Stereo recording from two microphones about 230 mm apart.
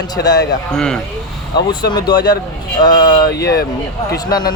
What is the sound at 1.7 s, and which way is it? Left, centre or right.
Speech, centre.